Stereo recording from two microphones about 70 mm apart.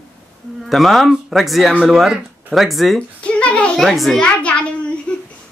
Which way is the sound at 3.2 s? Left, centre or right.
Centre.